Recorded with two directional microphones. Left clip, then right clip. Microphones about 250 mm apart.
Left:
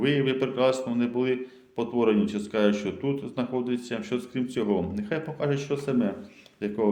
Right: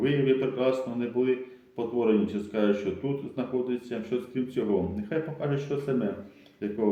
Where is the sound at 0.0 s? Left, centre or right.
Left.